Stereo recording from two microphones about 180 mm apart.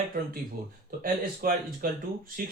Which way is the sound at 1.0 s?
55° right (ahead or behind).